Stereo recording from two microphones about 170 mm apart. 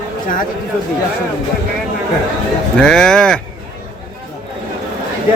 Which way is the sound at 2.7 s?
5° left (ahead or behind).